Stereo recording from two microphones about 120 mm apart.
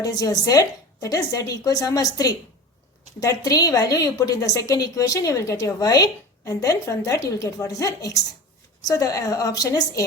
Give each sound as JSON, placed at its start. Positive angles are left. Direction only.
{"t": 0.0, "sound": "a woman's voice", "side_deg": 30}